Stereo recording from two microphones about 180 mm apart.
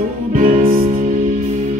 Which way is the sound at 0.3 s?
50° right (ahead or behind).